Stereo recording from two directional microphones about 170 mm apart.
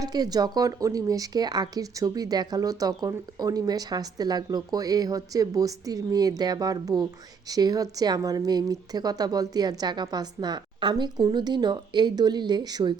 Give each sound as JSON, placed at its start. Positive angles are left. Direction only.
{"t": 0.0, "sound": "speech", "side_deg": -25}